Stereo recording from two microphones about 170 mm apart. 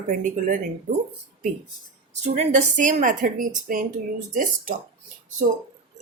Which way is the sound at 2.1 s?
45° right (ahead or behind).